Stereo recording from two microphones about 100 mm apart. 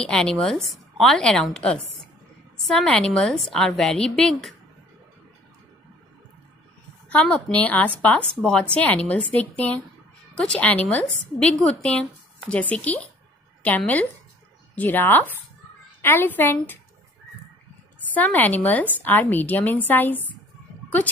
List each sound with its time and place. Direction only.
0.0 s a woman's voice: 5° left (ahead or behind)
7.1 s a woman's voice: 15° left (ahead or behind)
18.1 s a woman's voice: 15° left (ahead or behind)